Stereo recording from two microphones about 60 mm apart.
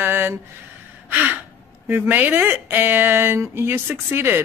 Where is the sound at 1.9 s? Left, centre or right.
Right.